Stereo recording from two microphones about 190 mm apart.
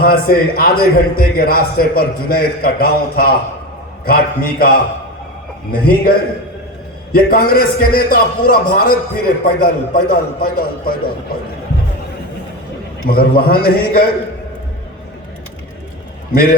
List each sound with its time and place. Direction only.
0.0 s a man's voice: 50° left (ahead or behind)
13.1 s a man's voice: 55° left (ahead or behind)
16.3 s a man's voice: 50° left (ahead or behind)